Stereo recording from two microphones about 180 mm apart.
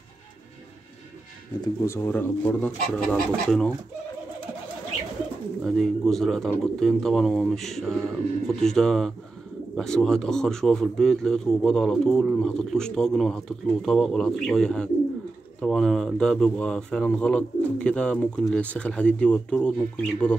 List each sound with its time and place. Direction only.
1.6 s speech: 15° left (ahead or behind)
5.6 s a man's voice: centre (ahead or behind)